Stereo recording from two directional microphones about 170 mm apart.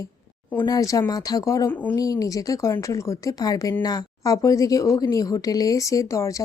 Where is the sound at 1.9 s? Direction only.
20° left (ahead or behind).